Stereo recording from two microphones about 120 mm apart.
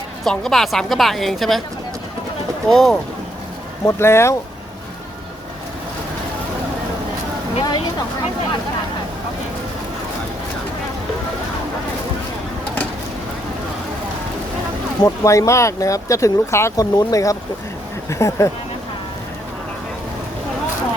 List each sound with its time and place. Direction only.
0.3 s a woman's voice: 5° left (ahead or behind)
2.6 s a woman's voice: centre (ahead or behind)
3.8 s speech: 20° left (ahead or behind)
7.6 s a sound: 35° left (ahead or behind)
15.0 s speech: 25° left (ahead or behind)